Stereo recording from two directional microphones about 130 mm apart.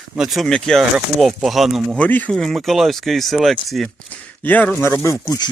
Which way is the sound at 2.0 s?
10° left (ahead or behind).